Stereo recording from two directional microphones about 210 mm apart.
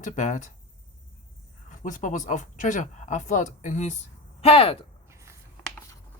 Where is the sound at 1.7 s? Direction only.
35° left (ahead or behind).